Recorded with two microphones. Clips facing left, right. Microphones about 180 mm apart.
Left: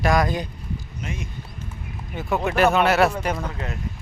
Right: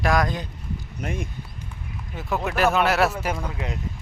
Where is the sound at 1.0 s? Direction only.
55° right (ahead or behind).